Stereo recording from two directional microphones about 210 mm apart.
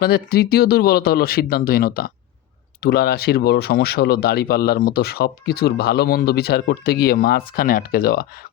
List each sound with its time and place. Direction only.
0.0 s speech: 45° left (ahead or behind)